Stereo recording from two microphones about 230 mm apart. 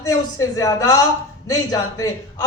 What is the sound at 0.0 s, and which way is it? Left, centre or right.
A man's voice, centre.